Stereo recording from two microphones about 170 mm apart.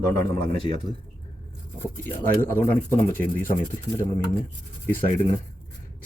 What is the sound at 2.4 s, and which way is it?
Speech, 10° left (ahead or behind).